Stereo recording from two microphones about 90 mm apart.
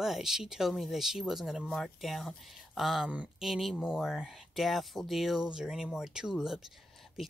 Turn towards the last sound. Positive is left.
turn(degrees=-5)  # may be behind; listen again after turning